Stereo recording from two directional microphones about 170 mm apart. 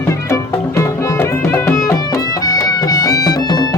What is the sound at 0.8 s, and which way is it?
Music, 15° left (ahead or behind).